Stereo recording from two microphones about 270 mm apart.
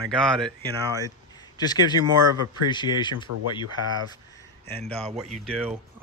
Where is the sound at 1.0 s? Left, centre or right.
Centre.